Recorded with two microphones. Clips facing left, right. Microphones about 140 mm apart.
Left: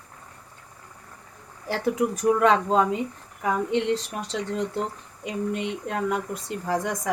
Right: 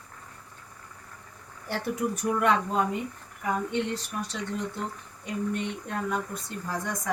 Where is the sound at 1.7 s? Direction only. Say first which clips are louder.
Left 5 dB; 90° left.